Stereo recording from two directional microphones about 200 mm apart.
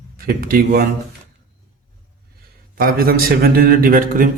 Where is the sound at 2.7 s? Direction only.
45° right (ahead or behind).